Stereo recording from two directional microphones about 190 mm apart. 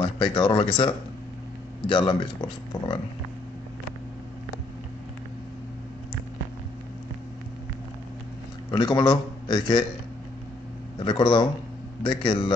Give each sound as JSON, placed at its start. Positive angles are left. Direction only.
{"t": 0.0, "sound": "speech", "side_deg": 25}
{"t": 8.6, "sound": "a man's voice", "side_deg": 25}
{"t": 11.0, "sound": "speech", "side_deg": 25}